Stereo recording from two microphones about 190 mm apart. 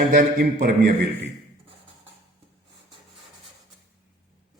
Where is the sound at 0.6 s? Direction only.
55° right (ahead or behind).